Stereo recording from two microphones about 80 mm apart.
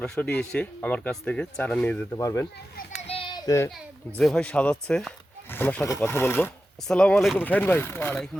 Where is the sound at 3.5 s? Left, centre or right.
Left.